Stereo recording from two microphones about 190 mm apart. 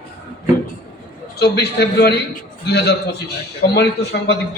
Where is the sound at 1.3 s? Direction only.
60° left (ahead or behind).